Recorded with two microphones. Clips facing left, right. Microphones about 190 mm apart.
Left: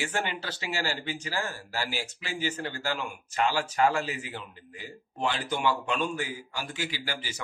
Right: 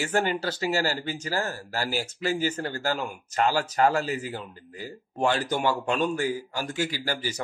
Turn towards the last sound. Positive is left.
turn(degrees=-40)  # may be behind; listen again after turning